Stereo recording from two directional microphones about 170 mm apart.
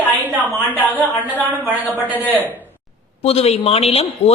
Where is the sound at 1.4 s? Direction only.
10° right (ahead or behind).